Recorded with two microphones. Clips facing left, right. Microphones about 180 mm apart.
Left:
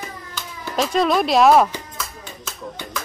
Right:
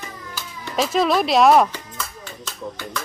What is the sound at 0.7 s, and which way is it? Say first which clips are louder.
Speech: even; centre (ahead or behind).